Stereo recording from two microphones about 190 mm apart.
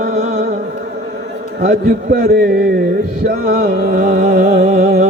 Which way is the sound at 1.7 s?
45° right (ahead or behind).